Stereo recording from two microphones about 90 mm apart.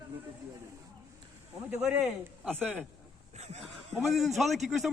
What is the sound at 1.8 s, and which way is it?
Speech, 10° right (ahead or behind).